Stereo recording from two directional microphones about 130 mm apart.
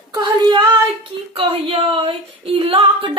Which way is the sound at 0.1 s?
35° right (ahead or behind).